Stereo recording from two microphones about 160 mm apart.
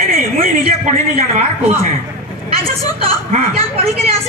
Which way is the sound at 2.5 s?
35° right (ahead or behind).